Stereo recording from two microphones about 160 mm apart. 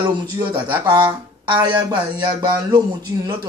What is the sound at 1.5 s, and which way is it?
Speech, 30° right (ahead or behind).